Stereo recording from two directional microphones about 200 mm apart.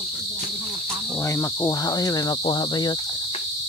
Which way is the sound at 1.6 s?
20° left (ahead or behind).